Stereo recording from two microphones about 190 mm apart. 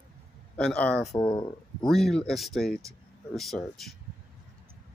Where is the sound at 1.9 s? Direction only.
Centre (ahead or behind).